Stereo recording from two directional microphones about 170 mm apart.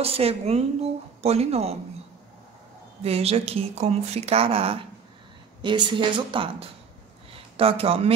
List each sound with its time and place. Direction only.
0.0 s a woman's voice: 35° right (ahead or behind)
3.0 s a woman's voice: 35° right (ahead or behind)